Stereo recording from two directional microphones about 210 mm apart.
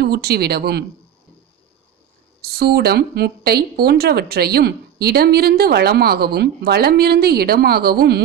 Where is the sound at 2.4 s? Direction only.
45° right (ahead or behind).